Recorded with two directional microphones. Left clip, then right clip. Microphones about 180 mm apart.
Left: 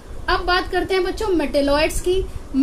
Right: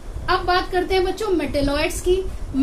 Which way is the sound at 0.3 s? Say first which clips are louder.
Even; 45° left (ahead or behind).